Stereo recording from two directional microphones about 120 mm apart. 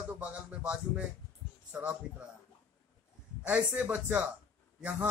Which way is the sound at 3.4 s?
15° right (ahead or behind).